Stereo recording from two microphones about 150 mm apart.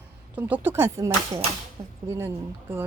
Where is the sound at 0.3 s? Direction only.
10° right (ahead or behind).